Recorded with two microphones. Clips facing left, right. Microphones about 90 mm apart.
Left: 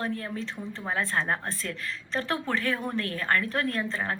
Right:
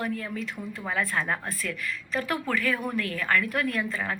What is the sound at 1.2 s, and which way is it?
A woman's voice, 20° left (ahead or behind).